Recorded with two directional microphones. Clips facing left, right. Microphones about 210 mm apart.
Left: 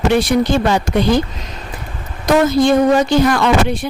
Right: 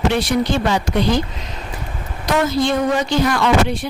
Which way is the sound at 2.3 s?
50° left (ahead or behind).